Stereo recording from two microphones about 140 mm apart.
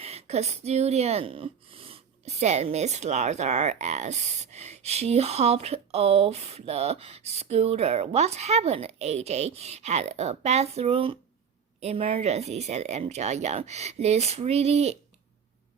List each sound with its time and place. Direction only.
0.0 s speech: 50° right (ahead or behind)